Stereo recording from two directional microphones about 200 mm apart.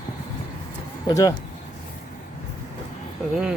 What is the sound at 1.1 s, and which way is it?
Speech, 20° left (ahead or behind).